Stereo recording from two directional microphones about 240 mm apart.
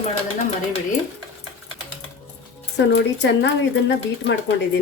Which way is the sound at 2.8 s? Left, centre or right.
Left.